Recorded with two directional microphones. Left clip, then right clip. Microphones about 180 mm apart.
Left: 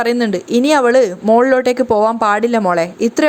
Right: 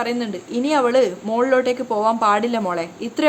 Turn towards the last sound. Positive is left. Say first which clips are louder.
# left 9 dB
turn(degrees=40)  # may be behind; listen again after turning